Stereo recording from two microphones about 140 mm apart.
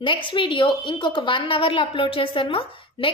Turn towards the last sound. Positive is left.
turn(degrees=40)  # may be behind; listen again after turning